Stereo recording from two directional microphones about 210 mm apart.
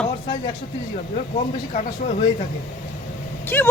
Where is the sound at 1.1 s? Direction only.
35° left (ahead or behind).